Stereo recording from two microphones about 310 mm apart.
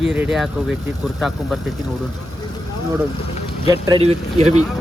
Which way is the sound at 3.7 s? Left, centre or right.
Centre.